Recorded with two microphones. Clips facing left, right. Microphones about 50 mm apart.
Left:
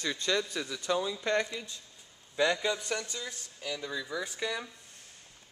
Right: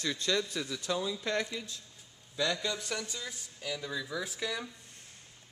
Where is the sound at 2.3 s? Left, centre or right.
Centre.